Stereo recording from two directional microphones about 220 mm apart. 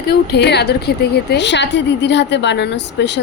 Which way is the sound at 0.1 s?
50° left (ahead or behind).